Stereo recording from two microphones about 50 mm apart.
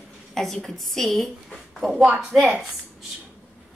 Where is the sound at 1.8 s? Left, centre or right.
Centre.